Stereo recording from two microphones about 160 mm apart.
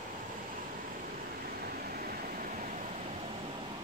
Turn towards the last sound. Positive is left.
turn(degrees=-55)  # may be behind; listen again after turning